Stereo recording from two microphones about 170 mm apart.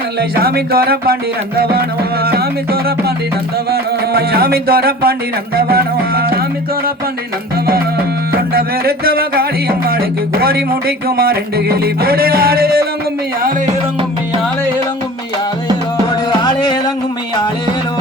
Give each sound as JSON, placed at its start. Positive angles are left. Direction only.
{"t": 0.2, "sound": "music", "side_deg": -65}
{"t": 8.3, "sound": "music", "side_deg": -65}